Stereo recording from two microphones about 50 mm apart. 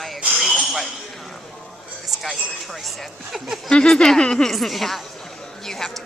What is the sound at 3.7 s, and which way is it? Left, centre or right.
A woman's voice, centre.